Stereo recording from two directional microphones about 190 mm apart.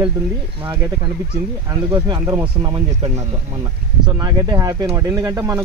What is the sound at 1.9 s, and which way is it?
Speech, 25° right (ahead or behind).